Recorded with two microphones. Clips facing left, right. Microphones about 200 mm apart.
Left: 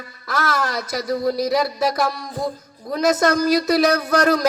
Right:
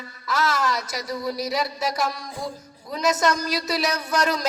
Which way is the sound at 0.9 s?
50° left (ahead or behind).